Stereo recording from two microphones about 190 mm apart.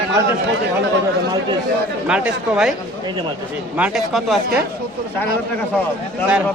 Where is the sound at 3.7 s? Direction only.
5° right (ahead or behind).